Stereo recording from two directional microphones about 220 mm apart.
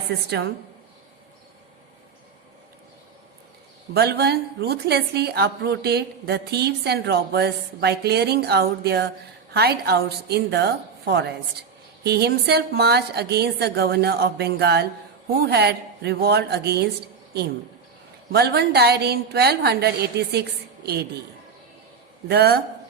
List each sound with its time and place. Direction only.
0.3 s a woman's voice: 50° right (ahead or behind)
3.9 s a woman's voice: 45° right (ahead or behind)
18.3 s a woman's voice: 45° right (ahead or behind)
22.3 s a woman's voice: 45° right (ahead or behind)